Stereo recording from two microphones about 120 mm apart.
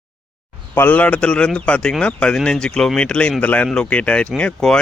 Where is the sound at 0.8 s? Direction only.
15° left (ahead or behind).